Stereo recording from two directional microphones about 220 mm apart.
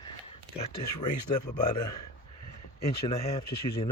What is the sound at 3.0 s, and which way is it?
Speech, 25° left (ahead or behind).